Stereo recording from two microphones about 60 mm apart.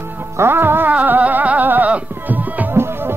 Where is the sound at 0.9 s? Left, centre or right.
Right.